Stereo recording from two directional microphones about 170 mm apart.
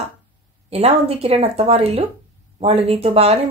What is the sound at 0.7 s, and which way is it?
Speech, 35° right (ahead or behind).